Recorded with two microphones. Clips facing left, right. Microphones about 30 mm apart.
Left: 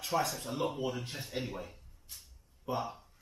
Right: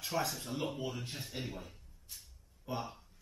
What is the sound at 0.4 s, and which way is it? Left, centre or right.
Speech, centre.